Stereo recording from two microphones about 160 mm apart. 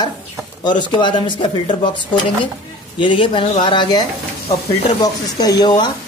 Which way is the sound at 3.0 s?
30° left (ahead or behind).